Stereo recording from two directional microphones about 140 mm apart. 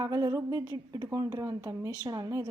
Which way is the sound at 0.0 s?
25° right (ahead or behind).